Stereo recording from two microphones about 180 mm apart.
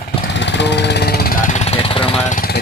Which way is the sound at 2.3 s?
50° left (ahead or behind).